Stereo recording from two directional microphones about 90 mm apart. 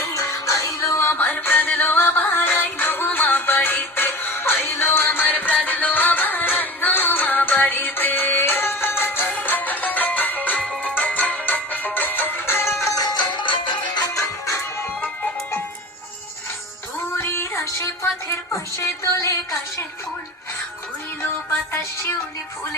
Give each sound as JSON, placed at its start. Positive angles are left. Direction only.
{"t": 0.0, "sound": "music", "side_deg": 35}
{"t": 12.8, "sound": "music", "side_deg": 40}
{"t": 14.1, "sound": "music", "side_deg": 35}
{"t": 17.2, "sound": "music", "side_deg": 30}
{"t": 18.8, "sound": "a sound", "side_deg": 35}